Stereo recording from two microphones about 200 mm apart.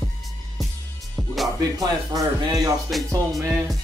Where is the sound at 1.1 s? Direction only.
Centre (ahead or behind).